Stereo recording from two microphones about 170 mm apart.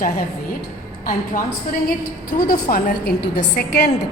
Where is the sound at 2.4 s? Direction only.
55° left (ahead or behind).